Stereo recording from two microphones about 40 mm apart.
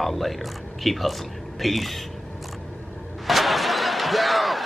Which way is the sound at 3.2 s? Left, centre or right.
Centre.